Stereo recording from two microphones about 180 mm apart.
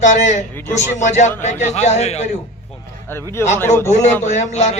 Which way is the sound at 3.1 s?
15° left (ahead or behind).